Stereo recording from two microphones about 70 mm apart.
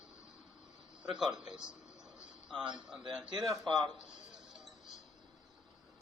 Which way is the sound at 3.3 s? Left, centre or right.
Right.